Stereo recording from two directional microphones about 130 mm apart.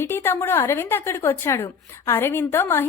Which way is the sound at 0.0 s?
20° left (ahead or behind).